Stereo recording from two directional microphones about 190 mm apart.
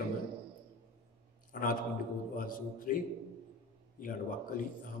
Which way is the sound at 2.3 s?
45° left (ahead or behind).